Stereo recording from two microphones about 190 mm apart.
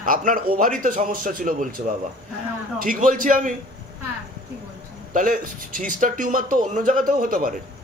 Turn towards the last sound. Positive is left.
turn(degrees=-45)  # may be behind; listen again after turning